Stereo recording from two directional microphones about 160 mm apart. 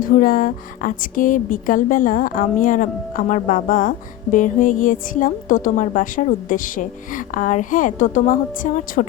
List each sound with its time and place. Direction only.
0.0 s a woman's voice: 60° left (ahead or behind)